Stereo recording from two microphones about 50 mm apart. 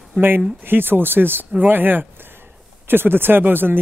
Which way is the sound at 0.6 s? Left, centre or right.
Right.